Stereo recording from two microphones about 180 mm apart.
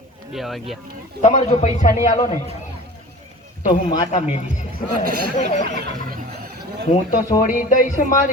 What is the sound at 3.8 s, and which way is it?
Speech, 40° left (ahead or behind).